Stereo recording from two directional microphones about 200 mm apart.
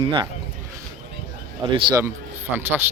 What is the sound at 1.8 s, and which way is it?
Speech, 25° right (ahead or behind).